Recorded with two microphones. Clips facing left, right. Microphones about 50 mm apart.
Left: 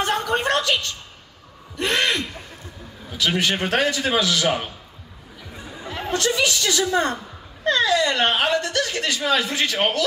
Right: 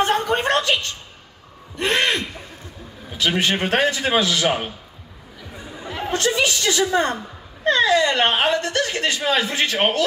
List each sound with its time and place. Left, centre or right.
0.0 s a sound: right
3.2 s speech: right
6.1 s speech: right